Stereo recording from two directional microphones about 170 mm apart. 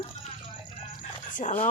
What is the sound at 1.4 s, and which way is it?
Speech, 45° left (ahead or behind).